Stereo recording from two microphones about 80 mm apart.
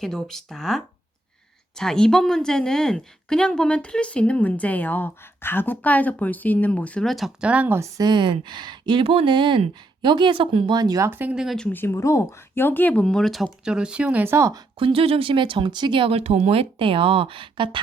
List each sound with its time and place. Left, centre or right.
0.0 s speech: centre
7.0 s speech: centre
7.4 s speech: centre
7.9 s speech: right
11.0 s speech: right
11.7 s speech: left
11.9 s speech: left; by 14.3 s right
14.3 s speech: right
14.8 s speech: right
16.8 s speech: right